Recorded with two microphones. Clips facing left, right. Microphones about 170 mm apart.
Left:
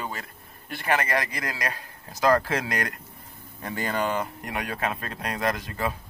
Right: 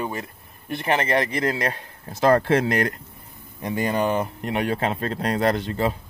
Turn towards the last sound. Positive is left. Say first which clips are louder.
# right 6 dB
turn(degrees=-30)  # may be behind; listen again after turning